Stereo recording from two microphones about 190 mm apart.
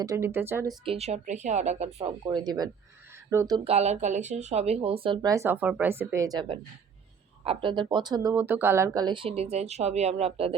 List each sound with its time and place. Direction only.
0.0 s speech: 15° right (ahead or behind)
0.9 s speech: 35° right (ahead or behind); by 3.6 s 15° right (ahead or behind)
3.6 s speech: 35° right (ahead or behind)